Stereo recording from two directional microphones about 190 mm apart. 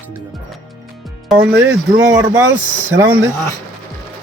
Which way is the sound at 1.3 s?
60° right (ahead or behind).